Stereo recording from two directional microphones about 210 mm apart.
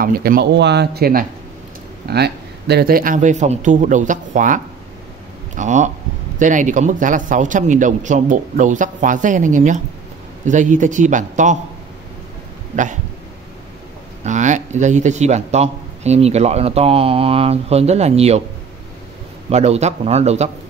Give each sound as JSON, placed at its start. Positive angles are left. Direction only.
{"t": 0.0, "sound": "a man's voice", "side_deg": -45}
{"t": 5.6, "sound": "a man's voice", "side_deg": -35}
{"t": 14.2, "sound": "a man's voice", "side_deg": -35}
{"t": 19.5, "sound": "a man's voice", "side_deg": -30}